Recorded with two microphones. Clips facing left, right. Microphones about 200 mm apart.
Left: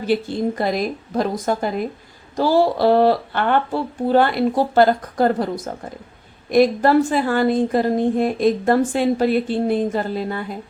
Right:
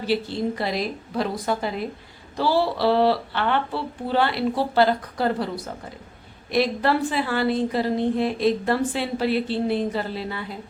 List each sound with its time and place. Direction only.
0.0 s a woman's voice: 50° left (ahead or behind)